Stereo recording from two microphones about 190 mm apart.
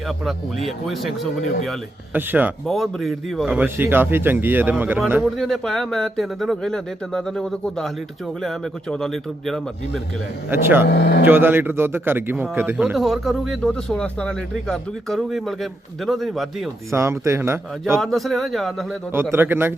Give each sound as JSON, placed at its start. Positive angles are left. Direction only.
{"t": 0.1, "sound": "a man's voice", "side_deg": 0}
{"t": 2.6, "sound": "a man's voice", "side_deg": 0}
{"t": 5.4, "sound": "a man's voice", "side_deg": 0}
{"t": 10.5, "sound": "a man's voice", "side_deg": -10}
{"t": 10.8, "sound": "speech", "side_deg": 60}
{"t": 11.3, "sound": "a man's voice", "side_deg": -10}
{"t": 16.9, "sound": "a man's voice", "side_deg": -15}
{"t": 18.0, "sound": "a man's voice", "side_deg": 0}
{"t": 19.1, "sound": "a man's voice", "side_deg": -10}